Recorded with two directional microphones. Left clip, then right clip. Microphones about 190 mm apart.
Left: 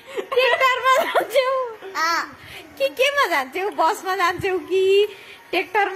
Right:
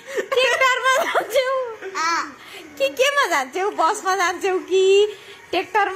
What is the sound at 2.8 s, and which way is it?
A woman's voice, centre (ahead or behind).